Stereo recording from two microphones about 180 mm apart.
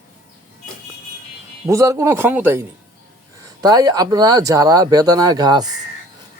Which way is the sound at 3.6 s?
20° right (ahead or behind).